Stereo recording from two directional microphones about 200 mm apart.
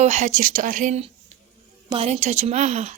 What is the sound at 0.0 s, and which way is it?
Speech, 35° right (ahead or behind).